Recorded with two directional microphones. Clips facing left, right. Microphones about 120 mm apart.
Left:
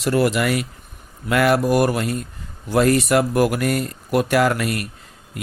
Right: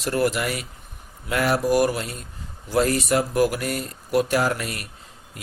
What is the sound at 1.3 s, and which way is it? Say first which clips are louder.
Speech: left 4 dB; 65° left (ahead or behind).